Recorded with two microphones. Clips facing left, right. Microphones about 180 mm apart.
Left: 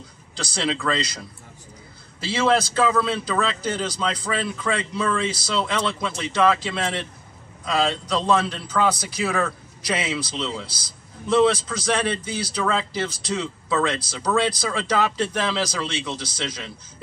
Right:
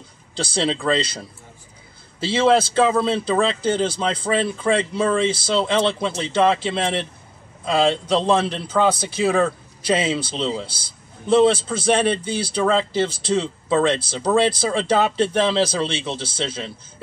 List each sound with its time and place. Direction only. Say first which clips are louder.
0.3 s a man's voice: right 4 dB; 30° right (ahead or behind)